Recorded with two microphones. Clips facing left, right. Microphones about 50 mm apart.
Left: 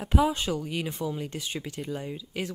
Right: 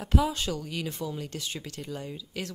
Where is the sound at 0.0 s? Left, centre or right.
Centre.